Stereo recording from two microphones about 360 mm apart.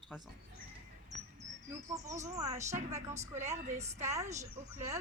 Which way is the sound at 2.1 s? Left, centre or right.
Centre.